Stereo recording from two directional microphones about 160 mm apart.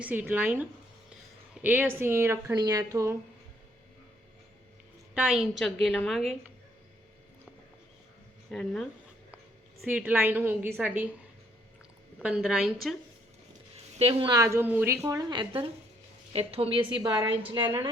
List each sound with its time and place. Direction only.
0.0 s speech: 10° right (ahead or behind)
5.1 s a woman's voice: 5° right (ahead or behind)
8.4 s a woman's voice: 5° left (ahead or behind)
12.2 s a woman's voice: 5° right (ahead or behind)
13.9 s a woman's voice: 35° right (ahead or behind)
14.3 s a woman's voice: 15° right (ahead or behind)